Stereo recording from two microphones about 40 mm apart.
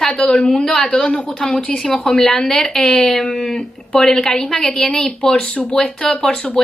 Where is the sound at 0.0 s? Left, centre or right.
Left.